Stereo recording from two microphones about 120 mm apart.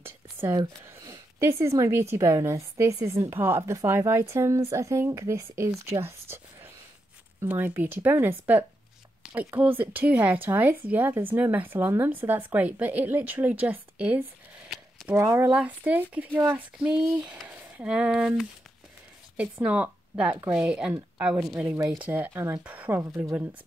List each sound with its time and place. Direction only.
0.0 s whispering: 20° right (ahead or behind)
1.4 s a woman's voice: 25° right (ahead or behind)
16.7 s speech: 10° right (ahead or behind)
17.0 s a woman's voice: 20° right (ahead or behind)